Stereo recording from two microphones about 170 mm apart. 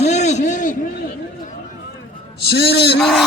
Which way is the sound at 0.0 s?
40° left (ahead or behind).